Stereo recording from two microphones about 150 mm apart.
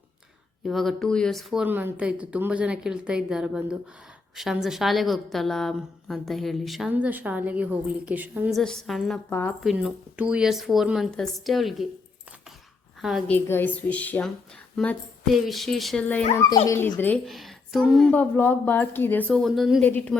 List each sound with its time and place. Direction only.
0.7 s a woman's voice: centre (ahead or behind)
1.6 s a woman's voice: 10° right (ahead or behind)
6.9 s speech: 10° right (ahead or behind)
8.4 s a woman's voice: centre (ahead or behind)
9.3 s a woman's voice: 15° left (ahead or behind)
9.6 s a woman's voice: 5° right (ahead or behind)
13.0 s a woman's voice: centre (ahead or behind)
13.3 s a woman's voice: 15° left (ahead or behind)
16.3 s a woman's voice: 20° left (ahead or behind)
17.2 s a woman's voice: centre (ahead or behind)
19.3 s a woman's voice: centre (ahead or behind)
19.8 s a woman's voice: 10° left (ahead or behind)